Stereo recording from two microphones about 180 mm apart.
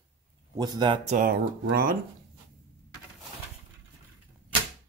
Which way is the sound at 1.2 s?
55° right (ahead or behind).